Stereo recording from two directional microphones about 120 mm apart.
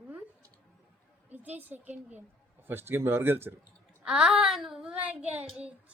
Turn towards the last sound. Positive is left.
turn(degrees=-15)  # may be behind; listen again after turning